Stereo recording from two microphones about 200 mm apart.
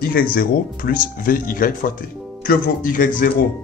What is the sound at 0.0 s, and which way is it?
Speech, 45° left (ahead or behind).